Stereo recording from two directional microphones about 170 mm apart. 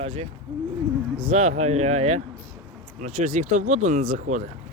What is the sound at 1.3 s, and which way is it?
Speech, 40° right (ahead or behind).